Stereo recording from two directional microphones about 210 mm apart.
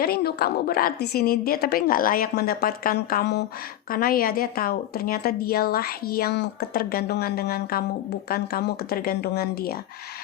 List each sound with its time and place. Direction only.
0.0 s a woman's voice: 45° left (ahead or behind)